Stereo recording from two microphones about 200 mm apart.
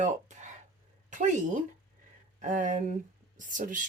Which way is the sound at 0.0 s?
35° right (ahead or behind).